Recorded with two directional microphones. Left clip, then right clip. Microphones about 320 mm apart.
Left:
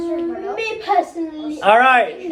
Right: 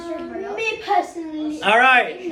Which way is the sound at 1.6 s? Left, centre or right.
Centre.